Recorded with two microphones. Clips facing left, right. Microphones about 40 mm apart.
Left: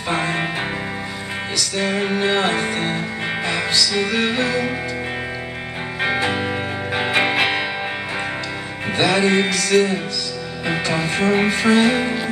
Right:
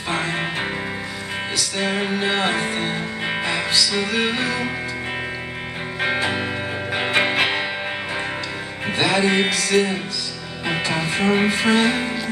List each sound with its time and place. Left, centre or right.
0.1 s music: centre
1.8 s speech: centre
2.0 s music: centre
5.9 s music: centre
8.8 s music: centre
9.4 s speech: centre
10.7 s music: centre